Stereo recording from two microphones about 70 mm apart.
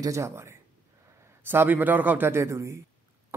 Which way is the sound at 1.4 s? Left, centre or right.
Right.